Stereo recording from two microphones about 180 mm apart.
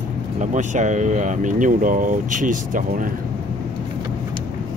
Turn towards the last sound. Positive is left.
turn(degrees=-45)  # may be behind; listen again after turning